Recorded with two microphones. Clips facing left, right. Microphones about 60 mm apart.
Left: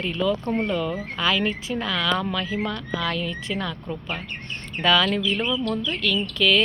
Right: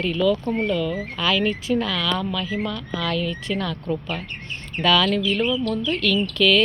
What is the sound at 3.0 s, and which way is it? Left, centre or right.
Speech, centre.